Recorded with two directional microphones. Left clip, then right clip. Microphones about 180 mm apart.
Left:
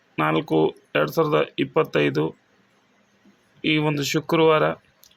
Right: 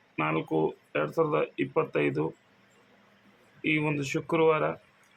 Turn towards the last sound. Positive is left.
turn(degrees=30)  # may be behind; listen again after turning